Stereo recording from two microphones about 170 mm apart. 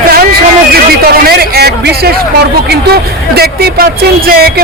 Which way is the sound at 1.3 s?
65° right (ahead or behind).